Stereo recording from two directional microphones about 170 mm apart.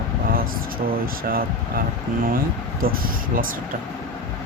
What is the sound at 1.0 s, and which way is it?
Speech, 60° right (ahead or behind).